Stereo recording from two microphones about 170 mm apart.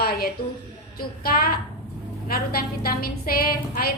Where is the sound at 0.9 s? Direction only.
60° left (ahead or behind).